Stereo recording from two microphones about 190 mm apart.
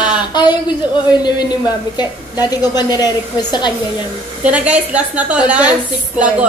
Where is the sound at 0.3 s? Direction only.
20° left (ahead or behind).